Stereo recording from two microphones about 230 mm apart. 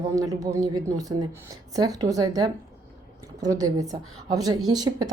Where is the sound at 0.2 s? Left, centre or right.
Centre.